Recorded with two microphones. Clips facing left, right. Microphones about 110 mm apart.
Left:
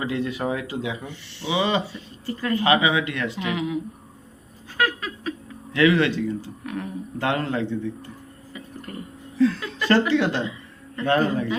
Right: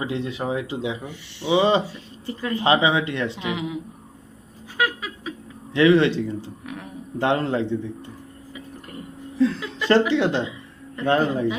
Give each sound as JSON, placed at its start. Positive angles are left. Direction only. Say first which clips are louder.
{"t": 0.0, "sound": "speech", "louder": "left 1 dB", "side_deg": -25}
{"t": 1.5, "sound": "speech", "louder": "right 5 dB", "side_deg": -30}
{"t": 4.8, "sound": "squeak", "louder": "even", "side_deg": -10}
{"t": 5.7, "sound": "speech", "louder": "right 3 dB", "side_deg": -25}
{"t": 9.4, "sound": "chuckle", "louder": "left 1 dB", "side_deg": -20}
{"t": 10.0, "sound": "speech", "louder": "right 1 dB", "side_deg": -20}